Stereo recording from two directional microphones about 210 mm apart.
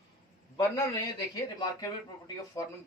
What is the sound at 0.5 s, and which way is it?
A man's voice, 15° left (ahead or behind).